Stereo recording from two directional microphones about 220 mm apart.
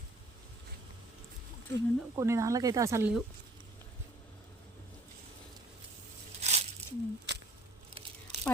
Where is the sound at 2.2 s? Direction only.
15° right (ahead or behind).